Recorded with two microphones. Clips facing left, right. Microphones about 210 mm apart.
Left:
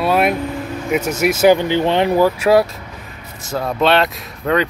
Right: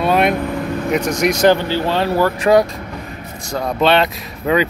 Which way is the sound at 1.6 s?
20° left (ahead or behind).